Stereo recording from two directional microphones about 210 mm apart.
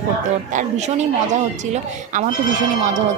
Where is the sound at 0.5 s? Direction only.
35° right (ahead or behind).